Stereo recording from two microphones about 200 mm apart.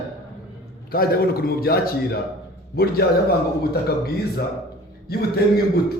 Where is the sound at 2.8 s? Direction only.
50° left (ahead or behind).